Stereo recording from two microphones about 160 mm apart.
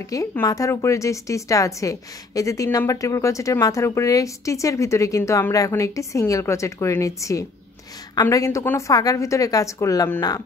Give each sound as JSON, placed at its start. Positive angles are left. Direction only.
{"t": 0.0, "sound": "a woman's voice", "side_deg": 20}